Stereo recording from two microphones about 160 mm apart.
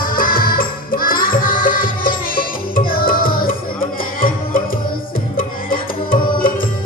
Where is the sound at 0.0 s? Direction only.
60° left (ahead or behind).